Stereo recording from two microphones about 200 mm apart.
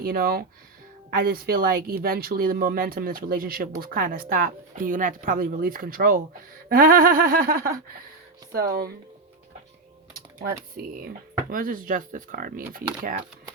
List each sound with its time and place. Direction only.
0.0 s speech: 50° right (ahead or behind)
10.3 s speech: 45° right (ahead or behind)